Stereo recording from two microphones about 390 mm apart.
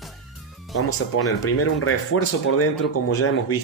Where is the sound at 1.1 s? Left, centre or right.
Left.